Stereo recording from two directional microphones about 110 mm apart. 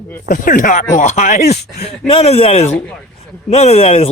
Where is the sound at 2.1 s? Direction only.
60° left (ahead or behind).